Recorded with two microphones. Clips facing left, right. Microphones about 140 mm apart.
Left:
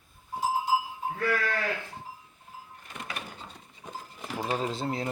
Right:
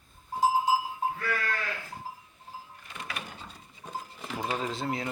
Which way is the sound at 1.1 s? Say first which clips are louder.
Left 5 dB; 70° left (ahead or behind).